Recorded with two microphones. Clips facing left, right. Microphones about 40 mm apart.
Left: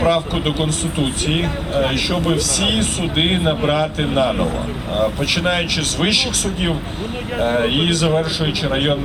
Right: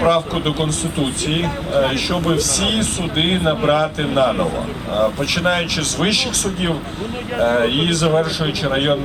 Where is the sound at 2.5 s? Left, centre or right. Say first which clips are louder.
Even; left.